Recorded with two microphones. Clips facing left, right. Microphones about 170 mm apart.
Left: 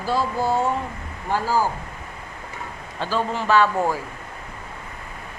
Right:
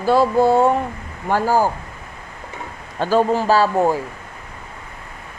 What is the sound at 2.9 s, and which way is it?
A man's voice, 45° right (ahead or behind).